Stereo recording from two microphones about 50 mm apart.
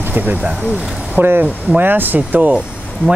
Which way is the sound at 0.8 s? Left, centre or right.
Centre.